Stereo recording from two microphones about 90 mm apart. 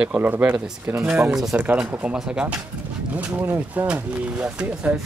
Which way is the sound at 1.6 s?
15° right (ahead or behind).